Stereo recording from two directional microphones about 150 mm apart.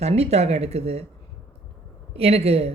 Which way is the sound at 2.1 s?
45° right (ahead or behind).